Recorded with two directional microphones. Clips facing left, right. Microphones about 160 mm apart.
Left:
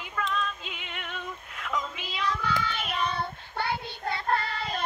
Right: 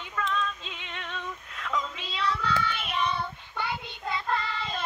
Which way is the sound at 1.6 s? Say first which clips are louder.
Right 1 dB; 10° left (ahead or behind).